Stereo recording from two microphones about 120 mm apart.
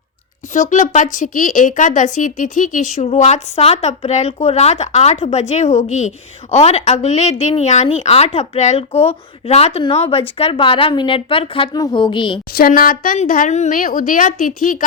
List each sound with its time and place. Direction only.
0.5 s a woman's voice: 85° left; by 11.7 s 50° left (ahead or behind)
11.7 s a woman's voice: 35° left (ahead or behind)
13.1 s a woman's voice: 75° left (ahead or behind); by 14.8 s 90° left